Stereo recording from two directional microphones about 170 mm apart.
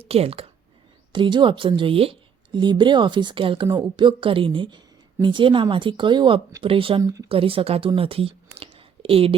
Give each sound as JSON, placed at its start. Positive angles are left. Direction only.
{"t": 0.0, "sound": "a woman's voice", "side_deg": -35}
{"t": 7.0, "sound": "a woman's voice", "side_deg": -20}
{"t": 7.3, "sound": "speech", "side_deg": -35}